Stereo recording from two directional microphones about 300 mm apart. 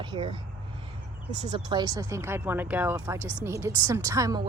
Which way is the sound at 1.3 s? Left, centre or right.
Right.